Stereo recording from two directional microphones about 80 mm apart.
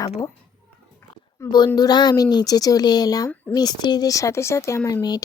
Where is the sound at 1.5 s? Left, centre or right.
Left.